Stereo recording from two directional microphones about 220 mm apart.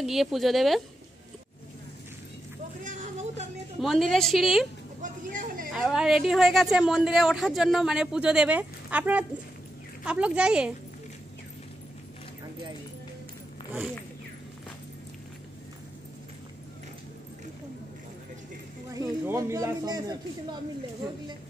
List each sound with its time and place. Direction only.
0.0 s a woman's voice: centre (ahead or behind)
2.8 s a sound: 35° right (ahead or behind)
3.8 s a woman's voice: centre (ahead or behind)
5.0 s a woman's voice: 35° right (ahead or behind)
5.7 s a woman's voice: centre (ahead or behind)
18.9 s speech: 15° right (ahead or behind)